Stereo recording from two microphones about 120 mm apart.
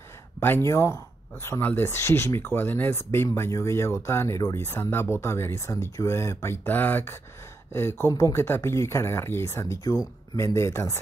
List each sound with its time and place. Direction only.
0.4 s speech: 20° left (ahead or behind)